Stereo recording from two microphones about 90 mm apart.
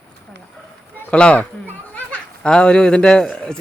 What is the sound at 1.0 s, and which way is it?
Speech, 10° left (ahead or behind).